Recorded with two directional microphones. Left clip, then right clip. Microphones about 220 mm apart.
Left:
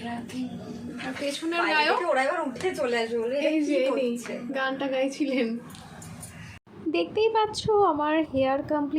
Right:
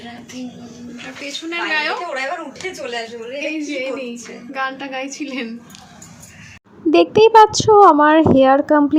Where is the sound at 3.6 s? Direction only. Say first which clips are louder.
Even; 5° right (ahead or behind).